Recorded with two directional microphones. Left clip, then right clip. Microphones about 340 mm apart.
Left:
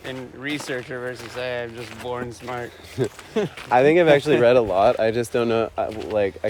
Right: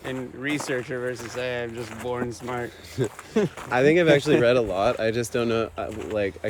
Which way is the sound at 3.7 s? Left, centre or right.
Centre.